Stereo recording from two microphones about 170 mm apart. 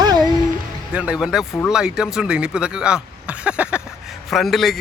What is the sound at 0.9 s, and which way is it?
A man's voice, 5° right (ahead or behind).